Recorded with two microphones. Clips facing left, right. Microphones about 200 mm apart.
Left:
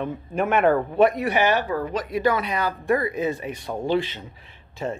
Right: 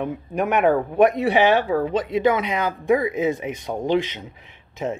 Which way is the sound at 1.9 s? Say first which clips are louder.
Right 3 dB; 25° right (ahead or behind).